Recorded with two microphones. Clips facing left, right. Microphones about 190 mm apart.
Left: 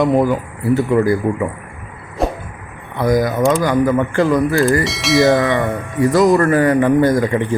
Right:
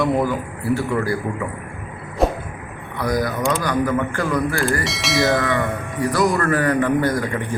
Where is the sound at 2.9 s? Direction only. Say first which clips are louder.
Left 6 dB; 20° left (ahead or behind).